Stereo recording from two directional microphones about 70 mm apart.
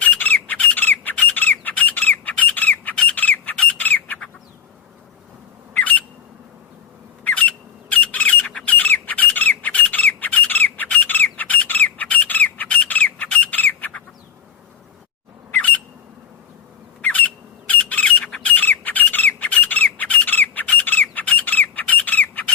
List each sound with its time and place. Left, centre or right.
0.0 s squawk: left
5.7 s squawk: left
7.3 s squawk: centre
15.5 s squawk: left
17.0 s squawk: left
18.2 s squawk: centre
18.4 s squawk: left
19.4 s bird: left